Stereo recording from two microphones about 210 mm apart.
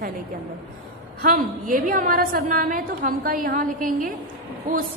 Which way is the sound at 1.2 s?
40° right (ahead or behind).